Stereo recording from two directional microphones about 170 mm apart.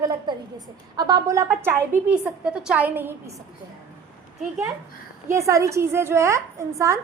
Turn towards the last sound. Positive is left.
turn(degrees=-20)  # may be behind; listen again after turning